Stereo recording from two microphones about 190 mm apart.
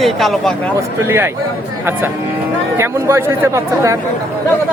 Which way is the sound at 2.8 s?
15° right (ahead or behind).